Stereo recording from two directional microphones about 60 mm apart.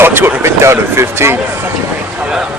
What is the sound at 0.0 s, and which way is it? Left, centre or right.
Speech, right.